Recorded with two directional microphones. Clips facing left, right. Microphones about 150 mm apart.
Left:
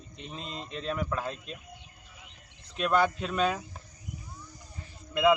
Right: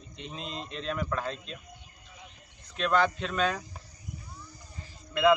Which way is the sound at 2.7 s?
10° left (ahead or behind).